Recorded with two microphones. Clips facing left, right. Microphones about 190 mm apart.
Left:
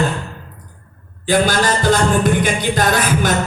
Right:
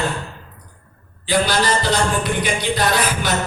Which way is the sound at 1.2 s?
45° left (ahead or behind).